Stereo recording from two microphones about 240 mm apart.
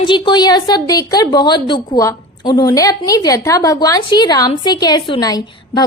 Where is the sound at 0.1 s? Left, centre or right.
Centre.